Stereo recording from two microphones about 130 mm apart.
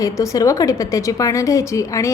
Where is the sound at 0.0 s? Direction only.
25° left (ahead or behind).